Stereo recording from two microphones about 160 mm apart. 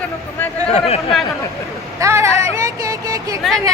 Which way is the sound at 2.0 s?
20° right (ahead or behind).